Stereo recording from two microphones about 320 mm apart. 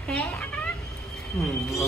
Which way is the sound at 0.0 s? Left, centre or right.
Centre.